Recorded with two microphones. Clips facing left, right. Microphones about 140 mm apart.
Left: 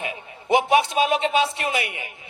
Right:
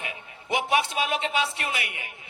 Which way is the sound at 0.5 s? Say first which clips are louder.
Left 7 dB; 25° left (ahead or behind).